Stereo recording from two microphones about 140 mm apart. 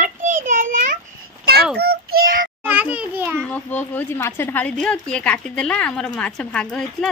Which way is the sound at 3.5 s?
10° left (ahead or behind).